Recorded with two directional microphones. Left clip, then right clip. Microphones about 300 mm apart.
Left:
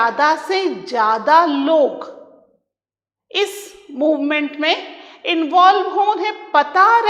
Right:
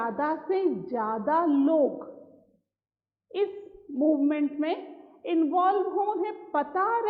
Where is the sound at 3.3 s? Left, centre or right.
Centre.